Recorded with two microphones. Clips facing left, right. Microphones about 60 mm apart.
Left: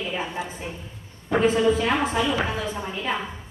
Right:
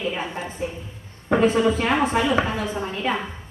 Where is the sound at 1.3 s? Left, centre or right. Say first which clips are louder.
Right 1 dB; right.